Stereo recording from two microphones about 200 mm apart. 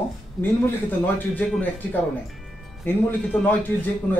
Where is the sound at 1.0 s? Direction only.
10° left (ahead or behind).